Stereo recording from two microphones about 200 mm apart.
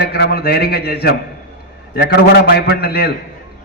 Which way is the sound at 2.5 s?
50° left (ahead or behind).